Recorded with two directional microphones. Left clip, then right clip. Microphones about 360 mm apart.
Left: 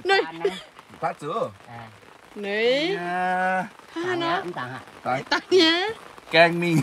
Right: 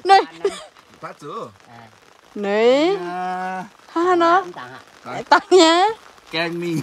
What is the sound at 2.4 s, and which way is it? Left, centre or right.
Speech, right.